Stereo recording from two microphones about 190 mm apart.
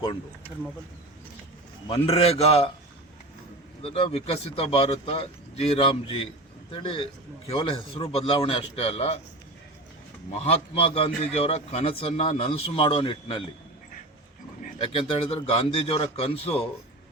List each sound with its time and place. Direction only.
1.9 s a man's voice: 30° left (ahead or behind)
3.8 s a man's voice: 30° left (ahead or behind)
10.3 s a man's voice: 30° left (ahead or behind)
14.8 s a man's voice: 30° left (ahead or behind)